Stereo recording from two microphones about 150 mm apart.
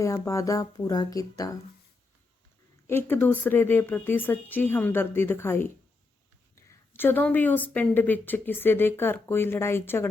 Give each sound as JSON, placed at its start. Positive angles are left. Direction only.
{"t": 0.0, "sound": "speech", "side_deg": 20}
{"t": 2.8, "sound": "a woman's voice", "side_deg": 15}